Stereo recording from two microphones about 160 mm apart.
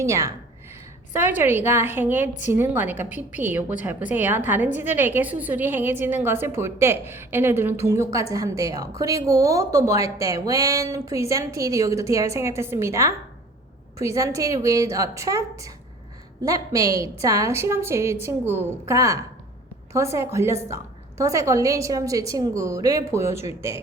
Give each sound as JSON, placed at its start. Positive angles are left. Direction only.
{"t": 0.0, "sound": "a woman's voice", "side_deg": -20}
{"t": 1.4, "sound": "a woman's voice", "side_deg": -15}